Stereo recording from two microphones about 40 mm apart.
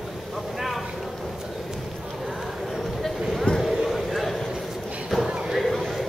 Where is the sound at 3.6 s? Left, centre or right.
Centre.